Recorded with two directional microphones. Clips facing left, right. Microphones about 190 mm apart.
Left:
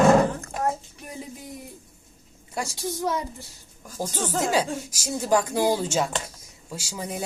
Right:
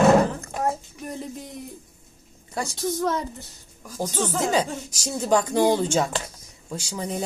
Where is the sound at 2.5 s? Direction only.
10° left (ahead or behind).